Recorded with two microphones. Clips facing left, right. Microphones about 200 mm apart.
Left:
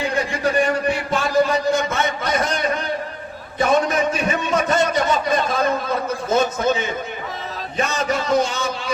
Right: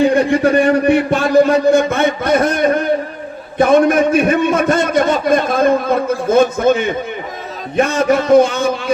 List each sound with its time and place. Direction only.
0.0 s a man's voice: 60° right (ahead or behind)